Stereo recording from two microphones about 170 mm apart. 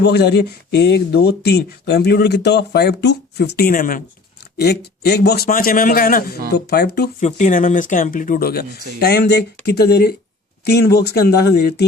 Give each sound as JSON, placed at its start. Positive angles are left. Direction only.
{"t": 0.0, "sound": "speech", "side_deg": 80}
{"t": 4.5, "sound": "a man's voice", "side_deg": 75}
{"t": 6.5, "sound": "speech", "side_deg": 70}
{"t": 7.2, "sound": "speech", "side_deg": 45}